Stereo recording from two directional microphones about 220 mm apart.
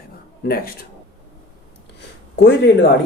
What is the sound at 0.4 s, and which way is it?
Speech, 45° left (ahead or behind).